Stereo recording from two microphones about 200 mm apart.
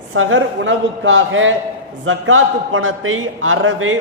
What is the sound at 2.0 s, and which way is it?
A man's voice, 85° right.